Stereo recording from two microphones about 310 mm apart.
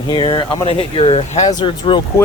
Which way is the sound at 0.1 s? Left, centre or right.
Centre.